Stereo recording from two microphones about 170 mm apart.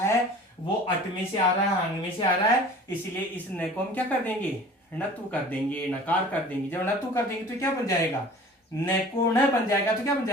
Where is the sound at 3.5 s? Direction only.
10° left (ahead or behind).